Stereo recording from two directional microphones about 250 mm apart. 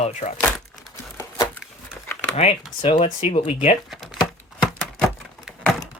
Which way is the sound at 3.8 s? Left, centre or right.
Centre.